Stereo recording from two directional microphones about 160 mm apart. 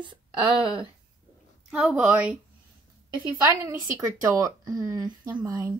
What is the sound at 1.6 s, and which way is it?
A woman's voice, 5° right (ahead or behind).